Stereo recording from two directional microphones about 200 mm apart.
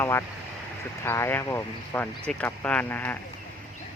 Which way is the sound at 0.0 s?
15° left (ahead or behind).